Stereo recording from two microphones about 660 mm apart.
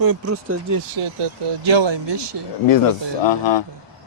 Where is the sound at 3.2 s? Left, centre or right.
Left.